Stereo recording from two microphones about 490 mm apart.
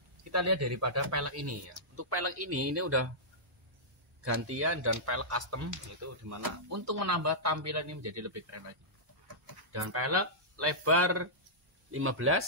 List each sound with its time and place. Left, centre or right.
0.3 s speech: right
4.2 s speech: right
9.7 s speech: right